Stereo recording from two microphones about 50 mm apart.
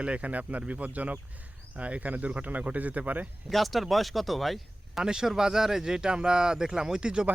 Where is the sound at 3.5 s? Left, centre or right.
Centre.